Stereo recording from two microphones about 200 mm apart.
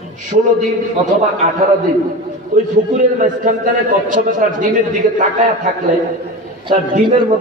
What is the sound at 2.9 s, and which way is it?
A man's voice, 40° right (ahead or behind).